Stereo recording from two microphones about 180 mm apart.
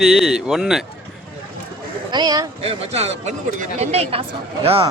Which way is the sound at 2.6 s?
35° right (ahead or behind).